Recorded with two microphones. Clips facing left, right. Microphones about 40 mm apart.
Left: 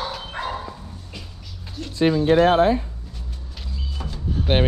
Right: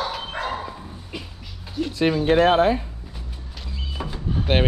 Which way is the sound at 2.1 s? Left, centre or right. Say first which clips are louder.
Left 1 dB; right.